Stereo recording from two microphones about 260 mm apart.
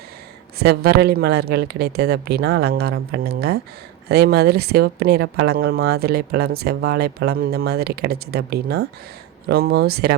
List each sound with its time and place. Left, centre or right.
0.6 s speech: right